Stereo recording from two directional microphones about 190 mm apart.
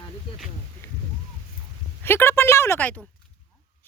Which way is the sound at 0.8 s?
15° left (ahead or behind).